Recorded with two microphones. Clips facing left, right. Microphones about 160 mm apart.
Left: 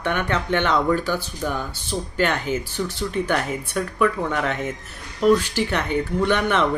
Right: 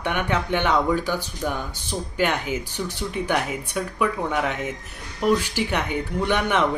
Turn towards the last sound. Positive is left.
turn(degrees=-10)  # may be behind; listen again after turning